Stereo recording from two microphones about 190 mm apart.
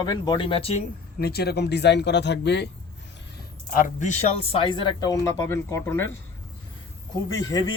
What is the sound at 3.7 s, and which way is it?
Speech, 40° left (ahead or behind).